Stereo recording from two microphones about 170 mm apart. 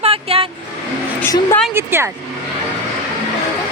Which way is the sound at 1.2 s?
10° left (ahead or behind).